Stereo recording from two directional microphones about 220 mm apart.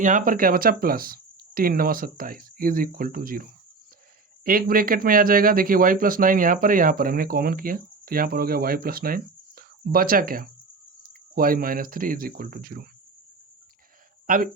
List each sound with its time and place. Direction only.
0.0 s speech: 35° right (ahead or behind)
14.3 s speech: 40° right (ahead or behind)